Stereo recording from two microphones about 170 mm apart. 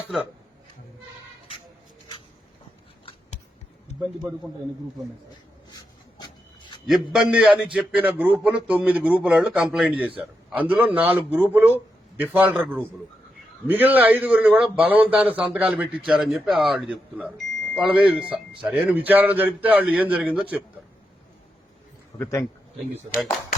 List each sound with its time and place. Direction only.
0.0 s speech: 10° right (ahead or behind)
5.7 s rub: 25° left (ahead or behind)
6.8 s a man's voice: centre (ahead or behind)